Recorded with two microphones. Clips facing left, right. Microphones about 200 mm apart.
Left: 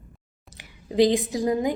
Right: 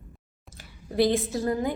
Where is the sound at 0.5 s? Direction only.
15° left (ahead or behind).